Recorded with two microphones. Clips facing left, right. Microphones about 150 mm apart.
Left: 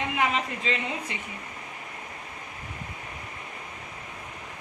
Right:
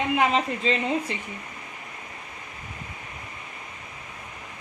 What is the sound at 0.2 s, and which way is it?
Speech, 25° right (ahead or behind).